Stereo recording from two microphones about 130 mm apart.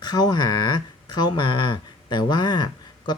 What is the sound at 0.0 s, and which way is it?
Speech, 30° left (ahead or behind).